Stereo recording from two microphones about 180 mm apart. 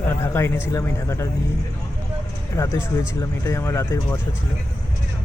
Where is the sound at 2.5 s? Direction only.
15° left (ahead or behind).